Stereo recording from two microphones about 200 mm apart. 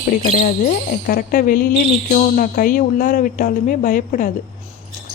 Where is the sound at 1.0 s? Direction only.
45° left (ahead or behind).